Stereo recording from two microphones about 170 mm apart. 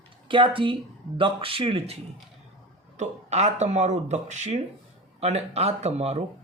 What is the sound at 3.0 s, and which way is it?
Speech, 40° right (ahead or behind).